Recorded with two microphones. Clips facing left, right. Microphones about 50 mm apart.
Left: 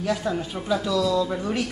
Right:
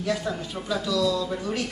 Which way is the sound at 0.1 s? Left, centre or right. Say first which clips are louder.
Left 2 dB; centre.